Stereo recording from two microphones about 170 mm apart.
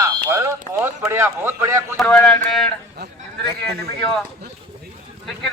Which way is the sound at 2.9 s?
70° right (ahead or behind).